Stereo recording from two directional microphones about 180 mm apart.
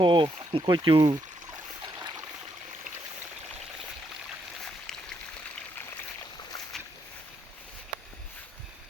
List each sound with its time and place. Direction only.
0.0 s speech: 25° right (ahead or behind)
4.6 s a sound: 5° left (ahead or behind)
6.7 s boat: centre (ahead or behind)